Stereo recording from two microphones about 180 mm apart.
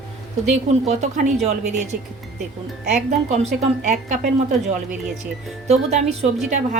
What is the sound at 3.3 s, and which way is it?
A woman's voice, 40° right (ahead or behind).